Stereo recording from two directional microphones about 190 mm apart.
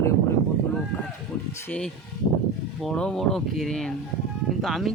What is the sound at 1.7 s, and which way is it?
Speech, 5° left (ahead or behind).